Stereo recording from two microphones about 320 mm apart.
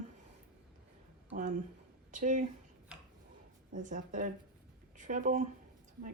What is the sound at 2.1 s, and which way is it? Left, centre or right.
Speech, right.